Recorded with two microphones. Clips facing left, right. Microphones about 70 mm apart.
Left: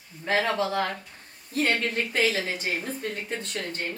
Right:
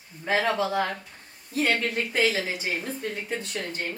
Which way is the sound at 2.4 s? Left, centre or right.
Centre.